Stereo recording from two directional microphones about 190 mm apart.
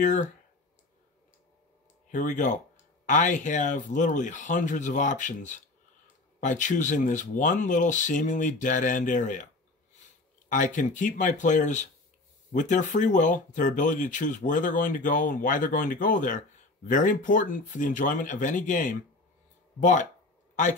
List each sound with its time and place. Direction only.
0.0 s speech: 40° left (ahead or behind)
2.0 s speech: 40° left (ahead or behind)
10.5 s speech: 40° left (ahead or behind)